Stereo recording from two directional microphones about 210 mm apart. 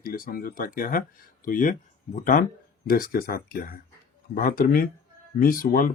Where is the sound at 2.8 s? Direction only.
45° left (ahead or behind).